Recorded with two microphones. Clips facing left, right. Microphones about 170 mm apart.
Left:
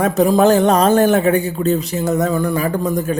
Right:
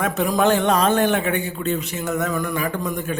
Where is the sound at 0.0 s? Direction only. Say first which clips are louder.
Left 6 dB; 35° left (ahead or behind).